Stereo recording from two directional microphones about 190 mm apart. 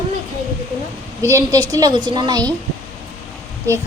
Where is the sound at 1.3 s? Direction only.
20° right (ahead or behind).